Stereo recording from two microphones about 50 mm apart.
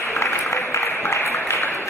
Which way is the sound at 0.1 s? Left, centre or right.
Left.